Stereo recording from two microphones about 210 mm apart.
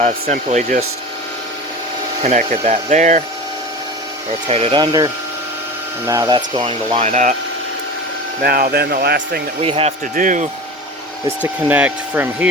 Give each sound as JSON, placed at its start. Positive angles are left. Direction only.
{"t": 0.0, "sound": "speech", "side_deg": -35}
{"t": 2.2, "sound": "speech", "side_deg": -35}
{"t": 4.4, "sound": "speech", "side_deg": -25}
{"t": 8.4, "sound": "speech", "side_deg": -45}
{"t": 9.6, "sound": "speech", "side_deg": -30}
{"t": 11.4, "sound": "speech", "side_deg": -5}